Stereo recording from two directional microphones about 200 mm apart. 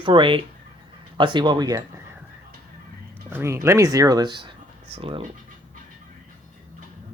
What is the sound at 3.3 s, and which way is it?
Speech, 15° right (ahead or behind).